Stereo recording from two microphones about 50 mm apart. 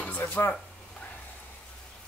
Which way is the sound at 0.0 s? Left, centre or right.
Left.